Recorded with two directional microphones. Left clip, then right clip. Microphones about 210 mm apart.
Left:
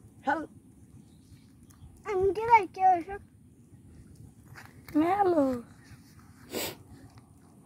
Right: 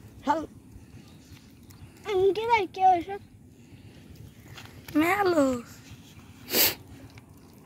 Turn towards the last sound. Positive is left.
turn(degrees=-5)  # may be behind; listen again after turning